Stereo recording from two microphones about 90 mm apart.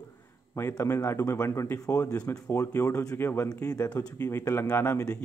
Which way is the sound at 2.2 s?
20° left (ahead or behind).